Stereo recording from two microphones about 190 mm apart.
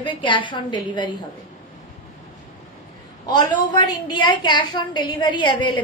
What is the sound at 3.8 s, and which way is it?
A woman's voice, 20° left (ahead or behind).